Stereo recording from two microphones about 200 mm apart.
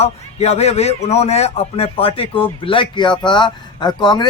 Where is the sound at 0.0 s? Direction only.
30° left (ahead or behind).